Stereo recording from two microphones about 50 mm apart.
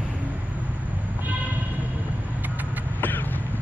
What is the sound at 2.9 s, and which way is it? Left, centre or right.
Vehicle, left.